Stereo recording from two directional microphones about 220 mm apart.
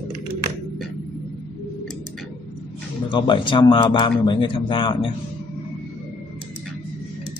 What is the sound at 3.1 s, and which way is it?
Speech, 20° left (ahead or behind).